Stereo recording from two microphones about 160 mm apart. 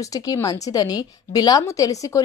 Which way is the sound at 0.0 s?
20° left (ahead or behind).